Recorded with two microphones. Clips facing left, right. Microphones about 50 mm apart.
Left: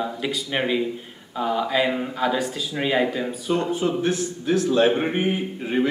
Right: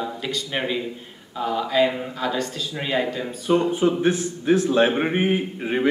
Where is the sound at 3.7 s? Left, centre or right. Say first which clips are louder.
Right 3 dB; centre.